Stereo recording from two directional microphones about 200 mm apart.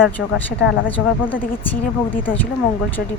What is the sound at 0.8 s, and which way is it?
A woman's voice, 10° left (ahead or behind).